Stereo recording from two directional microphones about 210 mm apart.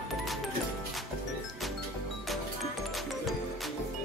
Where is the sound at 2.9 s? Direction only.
Centre (ahead or behind).